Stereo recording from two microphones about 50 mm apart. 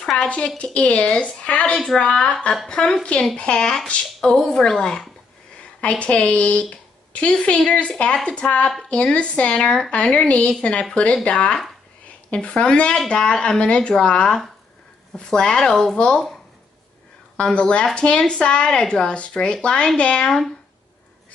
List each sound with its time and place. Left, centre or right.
0.1 s speech: left
5.6 s a woman's voice: left
17.4 s speech: centre
20.2 s speech: centre